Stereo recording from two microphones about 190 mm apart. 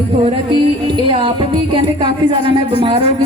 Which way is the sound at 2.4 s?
25° right (ahead or behind).